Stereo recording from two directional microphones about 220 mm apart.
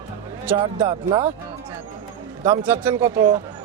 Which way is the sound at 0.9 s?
25° right (ahead or behind).